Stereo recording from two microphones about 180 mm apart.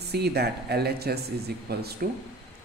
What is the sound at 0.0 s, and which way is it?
Speech, 65° right (ahead or behind).